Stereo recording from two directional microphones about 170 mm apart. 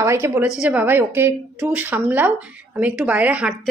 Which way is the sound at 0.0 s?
15° right (ahead or behind).